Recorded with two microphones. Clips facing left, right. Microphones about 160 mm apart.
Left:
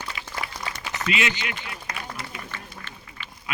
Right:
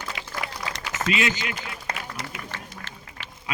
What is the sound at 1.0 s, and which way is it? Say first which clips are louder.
Speech: right 1 dB; 40° right (ahead or behind).